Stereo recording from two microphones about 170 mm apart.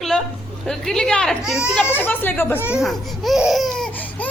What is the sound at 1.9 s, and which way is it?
Speech, 10° left (ahead or behind).